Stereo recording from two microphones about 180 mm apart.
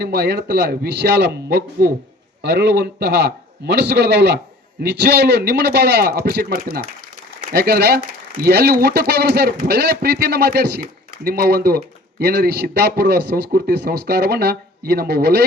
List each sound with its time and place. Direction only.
0.0 s a man's voice: 65° right (ahead or behind)